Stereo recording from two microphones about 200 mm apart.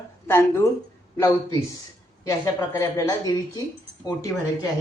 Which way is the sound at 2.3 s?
15° left (ahead or behind).